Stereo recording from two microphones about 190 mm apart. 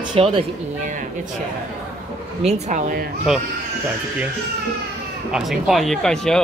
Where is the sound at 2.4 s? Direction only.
35° right (ahead or behind).